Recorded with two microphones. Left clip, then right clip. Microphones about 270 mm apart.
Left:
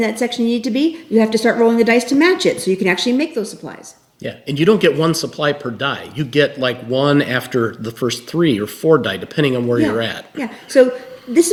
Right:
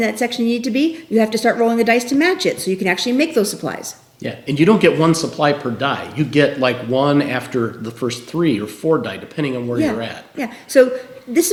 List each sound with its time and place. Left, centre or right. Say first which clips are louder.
0.0 s a woman's voice: even; centre
4.2 s speech: right 2 dB; left
10.3 s a woman's voice: even; centre